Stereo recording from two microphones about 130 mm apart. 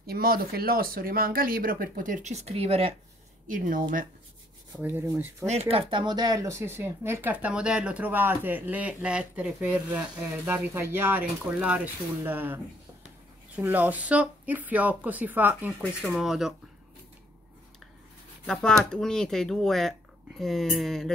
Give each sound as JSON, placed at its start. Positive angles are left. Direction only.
{"t": 1.1, "sound": "speech", "side_deg": -90}
{"t": 3.4, "sound": "speech", "side_deg": -90}
{"t": 4.7, "sound": "speech", "side_deg": -15}
{"t": 5.5, "sound": "speech", "side_deg": -50}
{"t": 13.6, "sound": "speech", "side_deg": -15}
{"t": 18.4, "sound": "speech", "side_deg": 5}